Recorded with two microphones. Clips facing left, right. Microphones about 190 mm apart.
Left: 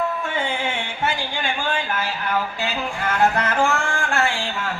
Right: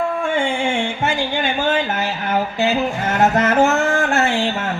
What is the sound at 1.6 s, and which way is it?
Speech, 20° right (ahead or behind).